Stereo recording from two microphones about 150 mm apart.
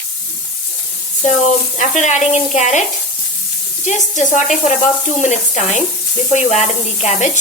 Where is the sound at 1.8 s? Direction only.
55° left (ahead or behind).